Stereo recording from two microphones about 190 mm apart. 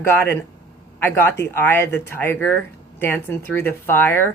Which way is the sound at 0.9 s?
10° left (ahead or behind).